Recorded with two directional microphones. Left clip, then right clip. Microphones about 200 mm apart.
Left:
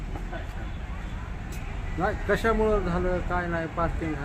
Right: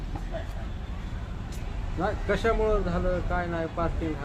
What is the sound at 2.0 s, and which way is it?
Speech, 55° left (ahead or behind).